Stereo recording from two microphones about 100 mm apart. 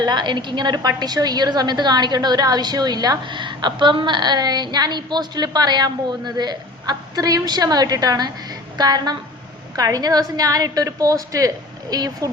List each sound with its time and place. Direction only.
0.0 s a woman's voice: 45° right (ahead or behind)